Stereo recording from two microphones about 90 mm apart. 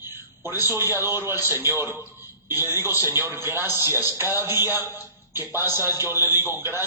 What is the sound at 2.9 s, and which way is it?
Speech, 40° left (ahead or behind).